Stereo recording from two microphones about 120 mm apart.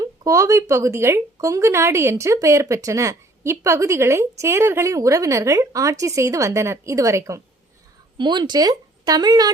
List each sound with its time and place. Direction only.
0.0 s speech: 25° right (ahead or behind)
8.2 s speech: 40° right (ahead or behind)